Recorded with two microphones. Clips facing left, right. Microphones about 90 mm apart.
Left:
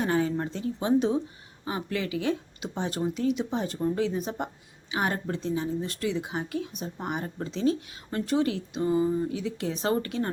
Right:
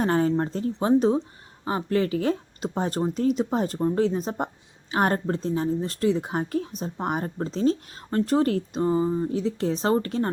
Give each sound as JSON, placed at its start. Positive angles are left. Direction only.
{"t": 0.0, "sound": "speech", "side_deg": -40}